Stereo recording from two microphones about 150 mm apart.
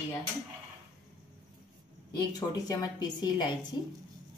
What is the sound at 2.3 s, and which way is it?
A woman's voice, 25° left (ahead or behind).